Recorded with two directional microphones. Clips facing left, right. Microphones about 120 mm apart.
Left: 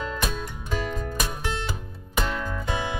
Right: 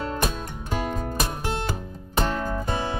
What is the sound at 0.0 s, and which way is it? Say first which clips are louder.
Music: right 2 dB; 45° right (ahead or behind).